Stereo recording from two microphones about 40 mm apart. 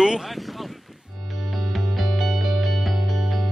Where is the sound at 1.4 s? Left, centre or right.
Centre.